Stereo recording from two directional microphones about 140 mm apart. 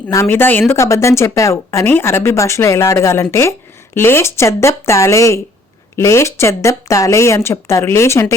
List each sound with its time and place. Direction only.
0.1 s speech: 20° left (ahead or behind)